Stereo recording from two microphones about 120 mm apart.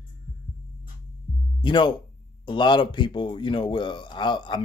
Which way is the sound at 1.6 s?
40° left (ahead or behind).